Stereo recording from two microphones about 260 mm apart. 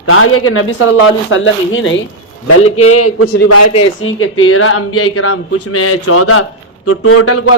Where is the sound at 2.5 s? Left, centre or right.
Left.